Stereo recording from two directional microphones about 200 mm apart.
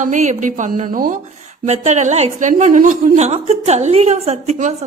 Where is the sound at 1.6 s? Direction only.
35° right (ahead or behind).